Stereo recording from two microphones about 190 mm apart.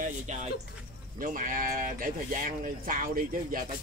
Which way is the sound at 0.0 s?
40° right (ahead or behind).